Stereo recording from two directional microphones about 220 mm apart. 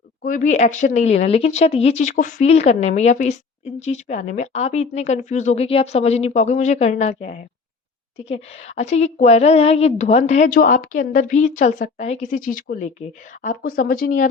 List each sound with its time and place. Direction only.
0.2 s a woman's voice: 35° left (ahead or behind)